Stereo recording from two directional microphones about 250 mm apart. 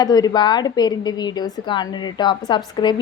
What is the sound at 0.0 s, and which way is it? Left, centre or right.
A woman's voice, centre.